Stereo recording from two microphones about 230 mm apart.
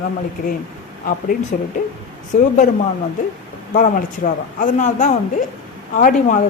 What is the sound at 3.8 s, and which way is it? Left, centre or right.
Speech, left.